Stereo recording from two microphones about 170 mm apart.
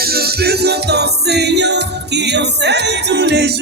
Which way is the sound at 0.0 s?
65° right (ahead or behind).